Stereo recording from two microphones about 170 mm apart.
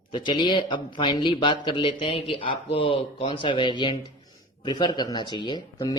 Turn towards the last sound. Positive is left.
turn(degrees=25)  # may be behind; listen again after turning